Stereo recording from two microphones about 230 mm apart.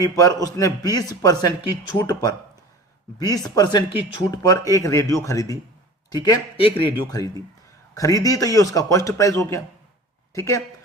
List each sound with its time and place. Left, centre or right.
0.0 s speech: centre